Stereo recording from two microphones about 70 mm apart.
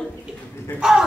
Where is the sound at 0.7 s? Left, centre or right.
Centre.